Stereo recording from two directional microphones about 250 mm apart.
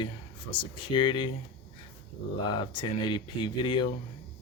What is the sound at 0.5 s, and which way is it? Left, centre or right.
Speech, left.